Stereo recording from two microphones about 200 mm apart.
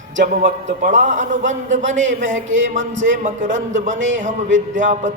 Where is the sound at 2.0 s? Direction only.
70° right (ahead or behind).